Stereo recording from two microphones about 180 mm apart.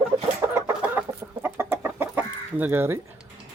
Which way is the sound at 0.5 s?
10° right (ahead or behind).